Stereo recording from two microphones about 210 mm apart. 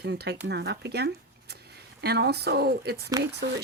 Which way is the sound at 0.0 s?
50° right (ahead or behind).